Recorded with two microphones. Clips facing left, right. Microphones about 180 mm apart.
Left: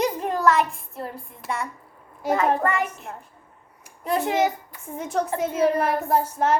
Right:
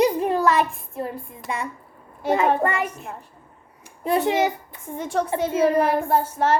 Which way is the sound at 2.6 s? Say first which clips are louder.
Right 1 dB; 15° right (ahead or behind).